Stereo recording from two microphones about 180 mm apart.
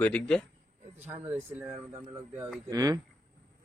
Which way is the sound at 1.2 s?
10° right (ahead or behind).